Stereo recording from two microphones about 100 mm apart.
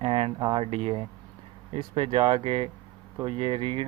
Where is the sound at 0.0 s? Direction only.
70° right (ahead or behind).